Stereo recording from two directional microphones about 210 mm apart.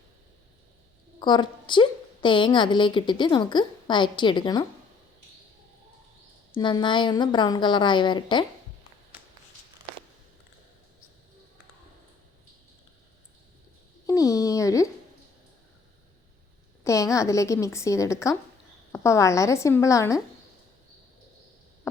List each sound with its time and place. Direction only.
1.2 s a woman's voice: 20° left (ahead or behind)
6.5 s a woman's voice: 20° left (ahead or behind)
14.1 s a sound: 15° left (ahead or behind)
16.8 s a woman's voice: 15° left (ahead or behind)